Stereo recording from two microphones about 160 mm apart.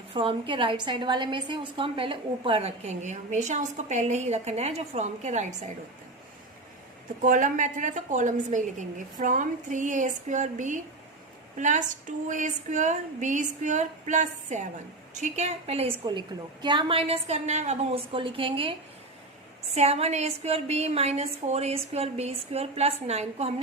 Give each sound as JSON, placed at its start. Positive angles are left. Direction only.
{"t": 0.1, "sound": "a woman's voice", "side_deg": -30}
{"t": 7.2, "sound": "a woman's voice", "side_deg": -55}
{"t": 16.0, "sound": "a woman's voice", "side_deg": -30}
{"t": 19.7, "sound": "a woman's voice", "side_deg": -40}